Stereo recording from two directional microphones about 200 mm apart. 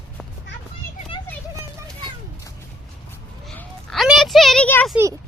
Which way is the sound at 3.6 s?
Centre (ahead or behind).